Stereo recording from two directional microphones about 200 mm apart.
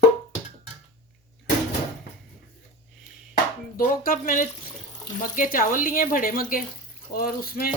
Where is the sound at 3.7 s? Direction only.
45° left (ahead or behind).